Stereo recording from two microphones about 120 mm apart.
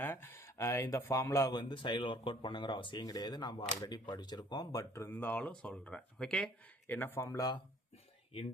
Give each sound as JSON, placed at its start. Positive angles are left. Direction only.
{"t": 0.0, "sound": "speech", "side_deg": 20}
{"t": 6.8, "sound": "speech", "side_deg": 20}